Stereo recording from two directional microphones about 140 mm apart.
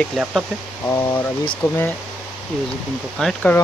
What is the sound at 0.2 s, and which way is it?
Speech, 5° right (ahead or behind).